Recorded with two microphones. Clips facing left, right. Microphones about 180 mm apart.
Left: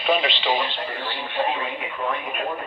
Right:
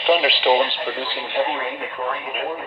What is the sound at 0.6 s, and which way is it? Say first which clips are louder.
Speech: right 5 dB; 75° right (ahead or behind).